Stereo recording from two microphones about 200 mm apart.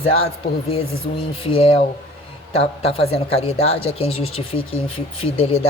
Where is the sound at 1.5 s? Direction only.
30° left (ahead or behind).